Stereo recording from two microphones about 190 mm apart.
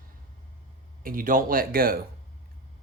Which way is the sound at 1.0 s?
45° right (ahead or behind).